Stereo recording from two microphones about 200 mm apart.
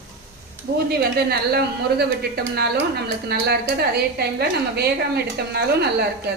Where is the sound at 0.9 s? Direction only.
55° right (ahead or behind).